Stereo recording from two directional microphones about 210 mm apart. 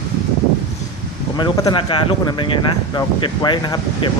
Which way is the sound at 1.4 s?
20° left (ahead or behind).